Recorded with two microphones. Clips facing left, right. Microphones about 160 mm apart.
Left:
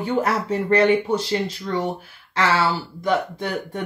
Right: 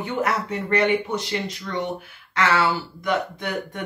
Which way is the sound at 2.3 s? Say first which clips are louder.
Left 1 dB; 30° left (ahead or behind).